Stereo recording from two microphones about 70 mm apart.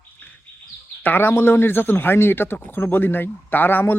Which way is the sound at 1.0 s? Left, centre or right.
Left.